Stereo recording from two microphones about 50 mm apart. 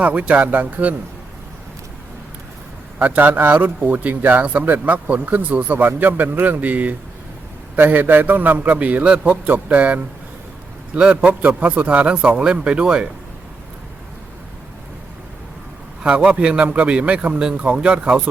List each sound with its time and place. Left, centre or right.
0.0 s speech: right
3.0 s speech: right; by 13.1 s centre
16.0 s speech: right